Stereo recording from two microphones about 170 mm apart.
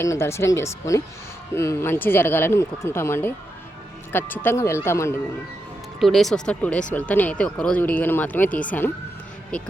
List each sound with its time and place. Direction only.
0.0 s speech: 15° left (ahead or behind)
6.0 s speech: centre (ahead or behind)